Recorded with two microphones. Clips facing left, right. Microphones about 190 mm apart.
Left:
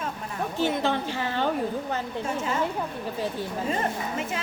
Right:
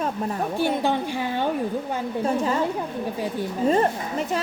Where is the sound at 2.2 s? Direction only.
35° right (ahead or behind).